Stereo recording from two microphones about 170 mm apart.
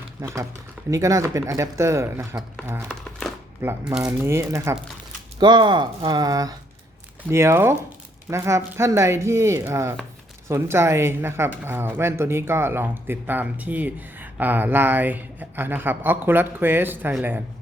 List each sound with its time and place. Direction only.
0.2 s speech: 15° right (ahead or behind)
2.9 s crumpling: centre (ahead or behind)
3.6 s speech: 15° right (ahead or behind)
5.4 s speech: 25° right (ahead or behind); by 17.4 s 10° right (ahead or behind)